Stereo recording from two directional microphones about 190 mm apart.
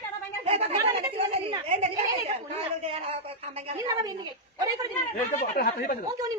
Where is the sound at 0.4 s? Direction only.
30° right (ahead or behind).